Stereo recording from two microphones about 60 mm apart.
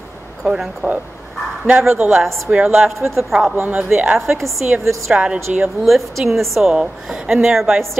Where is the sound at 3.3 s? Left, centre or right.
Centre.